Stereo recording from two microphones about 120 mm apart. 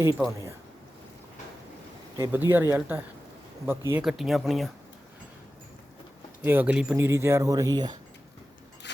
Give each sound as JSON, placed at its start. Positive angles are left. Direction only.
{"t": 0.0, "sound": "speech", "side_deg": -25}
{"t": 2.3, "sound": "speech", "side_deg": -15}
{"t": 4.0, "sound": "speech", "side_deg": 0}
{"t": 6.4, "sound": "speech", "side_deg": -15}